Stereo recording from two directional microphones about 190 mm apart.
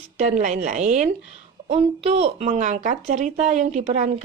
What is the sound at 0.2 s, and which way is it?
Speech, 40° right (ahead or behind).